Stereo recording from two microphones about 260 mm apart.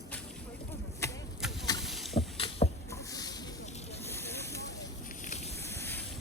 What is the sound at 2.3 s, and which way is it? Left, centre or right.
Vehicle, left.